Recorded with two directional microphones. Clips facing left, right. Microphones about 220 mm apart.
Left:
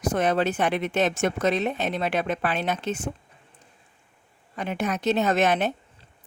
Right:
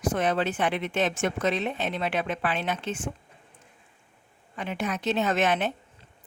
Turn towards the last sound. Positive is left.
turn(degrees=40)  # may be behind; listen again after turning